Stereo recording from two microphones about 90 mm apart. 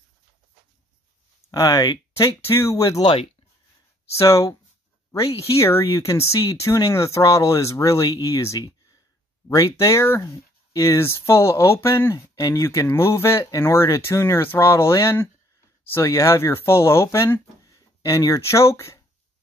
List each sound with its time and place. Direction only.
1.5 s speech: 40° left (ahead or behind)
2.4 s speech: 30° left (ahead or behind)
3.0 s speech: 65° left (ahead or behind)
4.1 s speech: 35° left (ahead or behind)